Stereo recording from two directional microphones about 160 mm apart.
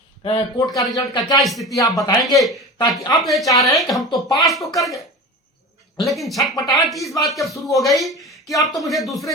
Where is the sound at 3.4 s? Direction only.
20° left (ahead or behind).